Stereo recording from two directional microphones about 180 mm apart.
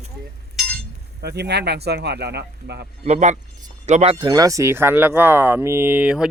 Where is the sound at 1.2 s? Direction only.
65° right (ahead or behind).